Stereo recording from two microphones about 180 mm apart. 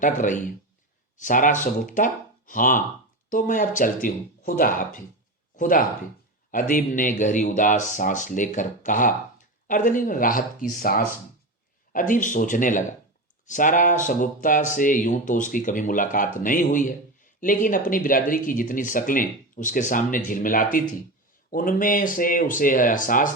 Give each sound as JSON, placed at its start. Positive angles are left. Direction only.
{"t": 0.0, "sound": "speech", "side_deg": 45}